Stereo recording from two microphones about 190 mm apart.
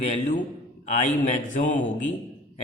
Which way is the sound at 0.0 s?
35° left (ahead or behind).